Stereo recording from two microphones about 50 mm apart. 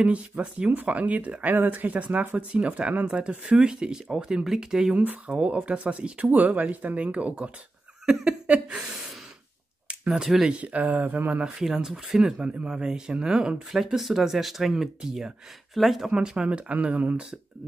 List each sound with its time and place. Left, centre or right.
0.0 s speech: right
5.3 s speech: right
8.0 s a sound: centre
10.5 s speech: right
11.6 s speech: centre
12.4 s speech: right
12.7 s speech: centre
13.8 s speech: centre
15.7 s speech: centre
16.2 s speech: centre